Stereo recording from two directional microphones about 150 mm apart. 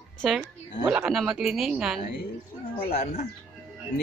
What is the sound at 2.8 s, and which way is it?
Speech, 45° left (ahead or behind).